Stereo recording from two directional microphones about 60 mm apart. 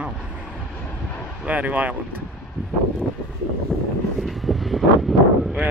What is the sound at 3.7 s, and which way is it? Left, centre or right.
Vehicle, centre.